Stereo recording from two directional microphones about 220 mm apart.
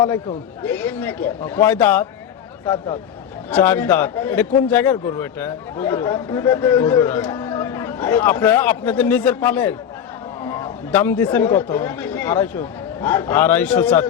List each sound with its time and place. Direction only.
0.6 s a man's voice: 5° left (ahead or behind)
2.6 s speech: 20° left (ahead or behind)
3.5 s a man's voice: 5° left (ahead or behind)